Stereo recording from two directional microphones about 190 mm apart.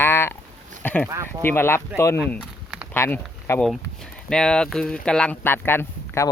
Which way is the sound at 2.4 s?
5° right (ahead or behind).